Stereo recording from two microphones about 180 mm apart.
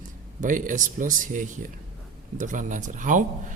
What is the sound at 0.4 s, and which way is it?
A man's voice, 45° right (ahead or behind).